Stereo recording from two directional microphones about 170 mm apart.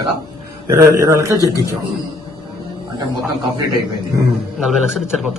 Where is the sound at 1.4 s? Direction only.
20° left (ahead or behind).